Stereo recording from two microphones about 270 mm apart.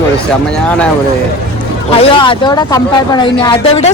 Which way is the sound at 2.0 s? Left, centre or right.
Centre.